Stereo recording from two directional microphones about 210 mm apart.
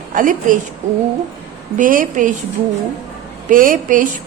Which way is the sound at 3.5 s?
40° right (ahead or behind).